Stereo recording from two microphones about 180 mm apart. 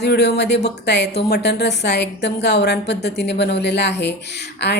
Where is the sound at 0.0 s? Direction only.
65° left (ahead or behind).